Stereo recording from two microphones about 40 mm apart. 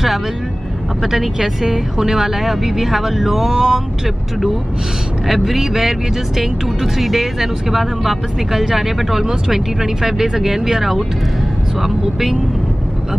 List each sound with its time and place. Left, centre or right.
1.0 s speech: centre
5.3 s speech: centre